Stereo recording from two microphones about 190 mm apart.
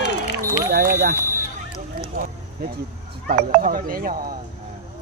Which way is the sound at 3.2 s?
45° right (ahead or behind).